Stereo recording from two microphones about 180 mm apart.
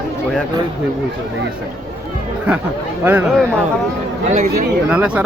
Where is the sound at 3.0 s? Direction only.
10° right (ahead or behind).